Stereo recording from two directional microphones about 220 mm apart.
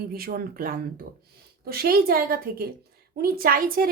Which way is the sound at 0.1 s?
40° right (ahead or behind).